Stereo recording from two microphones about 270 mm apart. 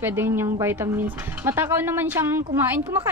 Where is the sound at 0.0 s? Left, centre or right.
Centre.